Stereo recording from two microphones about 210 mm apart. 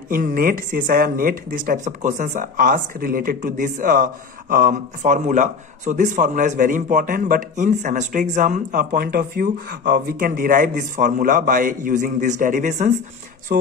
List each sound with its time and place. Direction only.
0.1 s speech: 45° right (ahead or behind)
13.5 s speech: 50° right (ahead or behind)